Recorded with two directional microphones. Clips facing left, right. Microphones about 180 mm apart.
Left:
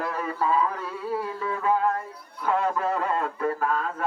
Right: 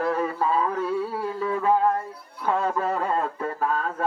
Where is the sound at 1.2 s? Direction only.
30° right (ahead or behind).